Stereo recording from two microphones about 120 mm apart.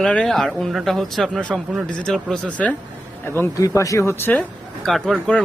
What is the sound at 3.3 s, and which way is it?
Speech, 20° left (ahead or behind).